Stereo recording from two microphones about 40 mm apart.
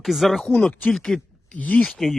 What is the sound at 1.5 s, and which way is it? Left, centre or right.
Speech, left.